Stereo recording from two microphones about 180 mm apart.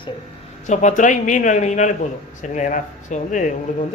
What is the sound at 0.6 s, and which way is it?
A man's voice, 40° left (ahead or behind).